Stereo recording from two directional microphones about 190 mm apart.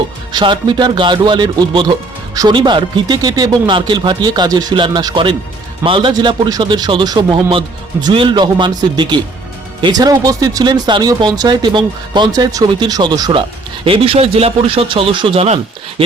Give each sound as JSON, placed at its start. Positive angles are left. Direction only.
{"t": 0.3, "sound": "a man's voice", "side_deg": -25}